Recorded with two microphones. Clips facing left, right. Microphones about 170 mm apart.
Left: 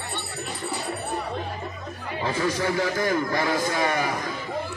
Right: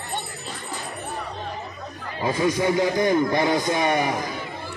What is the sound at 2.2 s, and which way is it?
A man's voice, 20° right (ahead or behind).